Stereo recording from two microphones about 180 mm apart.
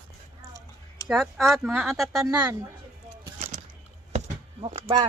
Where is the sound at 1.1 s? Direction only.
Centre (ahead or behind).